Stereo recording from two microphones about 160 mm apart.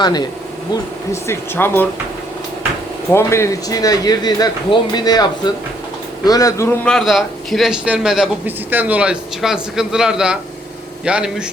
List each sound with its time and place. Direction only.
0.0 s speech: 25° left (ahead or behind)
3.1 s speech: 15° left (ahead or behind)
6.8 s a man's voice: centre (ahead or behind)